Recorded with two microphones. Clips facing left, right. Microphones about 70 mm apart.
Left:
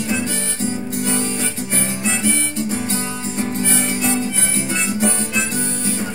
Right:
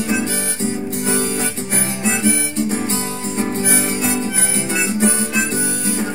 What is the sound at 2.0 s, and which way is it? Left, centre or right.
Guitar, right.